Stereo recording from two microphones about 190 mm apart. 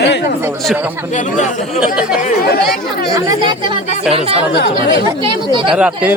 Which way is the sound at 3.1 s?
20° right (ahead or behind).